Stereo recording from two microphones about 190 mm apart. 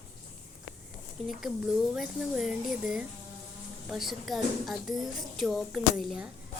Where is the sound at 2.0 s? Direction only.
Centre (ahead or behind).